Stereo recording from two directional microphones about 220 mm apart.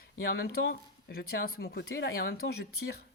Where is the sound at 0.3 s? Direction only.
45° left (ahead or behind).